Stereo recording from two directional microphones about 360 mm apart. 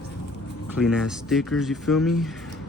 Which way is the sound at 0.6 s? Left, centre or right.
Centre.